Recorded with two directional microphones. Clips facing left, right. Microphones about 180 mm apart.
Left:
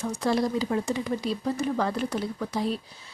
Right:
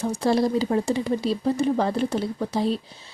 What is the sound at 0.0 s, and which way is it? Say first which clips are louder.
Speech: right 4 dB; 30° right (ahead or behind).